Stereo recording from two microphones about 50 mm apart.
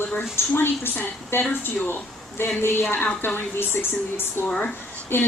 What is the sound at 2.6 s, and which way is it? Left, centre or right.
A woman's voice, left.